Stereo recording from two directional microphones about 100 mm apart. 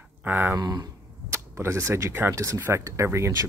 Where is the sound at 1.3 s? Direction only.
25° right (ahead or behind).